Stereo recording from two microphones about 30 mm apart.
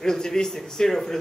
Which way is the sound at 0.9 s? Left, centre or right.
Centre.